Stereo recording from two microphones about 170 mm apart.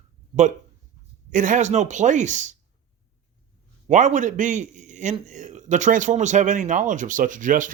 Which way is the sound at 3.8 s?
45° right (ahead or behind).